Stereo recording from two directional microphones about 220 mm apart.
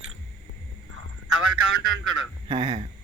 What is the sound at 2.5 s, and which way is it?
Speech, 25° right (ahead or behind).